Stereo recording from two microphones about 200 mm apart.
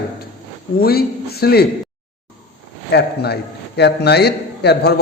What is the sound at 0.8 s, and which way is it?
Speech, 50° left (ahead or behind).